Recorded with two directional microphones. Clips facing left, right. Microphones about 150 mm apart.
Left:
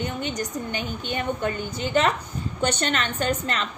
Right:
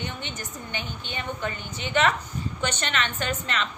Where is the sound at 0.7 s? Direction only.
50° left (ahead or behind).